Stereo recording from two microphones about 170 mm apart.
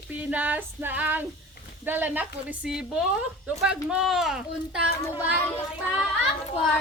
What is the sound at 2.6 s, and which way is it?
Speech, 5° right (ahead or behind).